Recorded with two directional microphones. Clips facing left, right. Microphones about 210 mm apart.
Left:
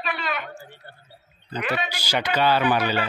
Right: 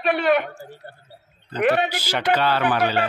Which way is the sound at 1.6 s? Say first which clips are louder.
Right 8 dB; 60° right (ahead or behind).